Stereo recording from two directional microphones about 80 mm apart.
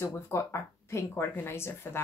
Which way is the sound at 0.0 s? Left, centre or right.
Left.